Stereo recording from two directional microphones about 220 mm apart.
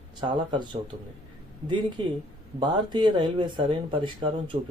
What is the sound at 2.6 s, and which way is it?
Speech, 20° right (ahead or behind).